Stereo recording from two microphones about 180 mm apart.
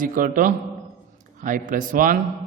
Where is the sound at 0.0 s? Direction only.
50° right (ahead or behind).